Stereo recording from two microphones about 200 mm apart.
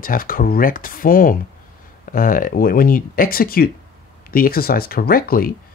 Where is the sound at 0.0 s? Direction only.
45° left (ahead or behind).